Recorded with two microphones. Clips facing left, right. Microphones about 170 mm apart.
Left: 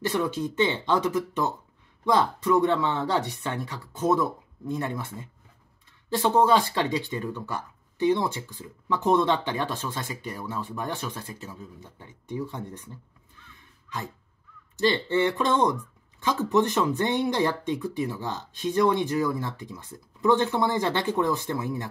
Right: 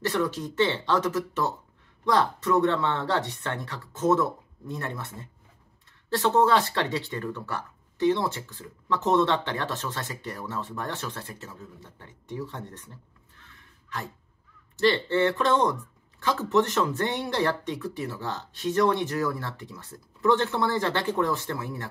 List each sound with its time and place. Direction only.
0.1 s speech: 20° left (ahead or behind)
6.1 s speech: 15° left (ahead or behind)
13.6 s a sound: 20° left (ahead or behind)
14.8 s speech: 15° left (ahead or behind)